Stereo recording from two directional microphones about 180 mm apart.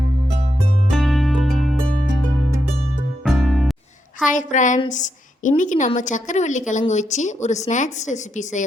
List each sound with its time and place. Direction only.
0.9 s music: centre (ahead or behind)
3.2 s music: centre (ahead or behind)
4.3 s a woman's voice: 45° left (ahead or behind)